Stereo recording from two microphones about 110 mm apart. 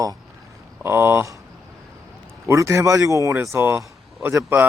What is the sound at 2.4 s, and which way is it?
Speech, 25° right (ahead or behind).